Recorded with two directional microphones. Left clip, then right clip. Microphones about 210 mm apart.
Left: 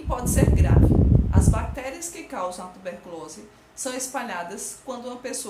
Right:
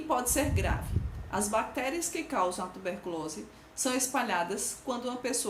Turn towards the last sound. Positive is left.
turn(degrees=-15)  # may be behind; listen again after turning